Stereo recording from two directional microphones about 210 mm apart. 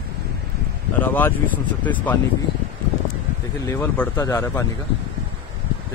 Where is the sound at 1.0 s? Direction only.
10° left (ahead or behind).